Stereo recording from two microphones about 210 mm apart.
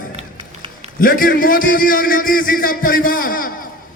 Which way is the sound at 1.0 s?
45° left (ahead or behind).